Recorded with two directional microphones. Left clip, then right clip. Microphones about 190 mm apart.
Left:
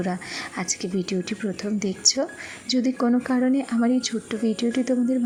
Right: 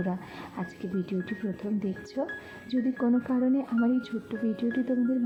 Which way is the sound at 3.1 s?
25° left (ahead or behind).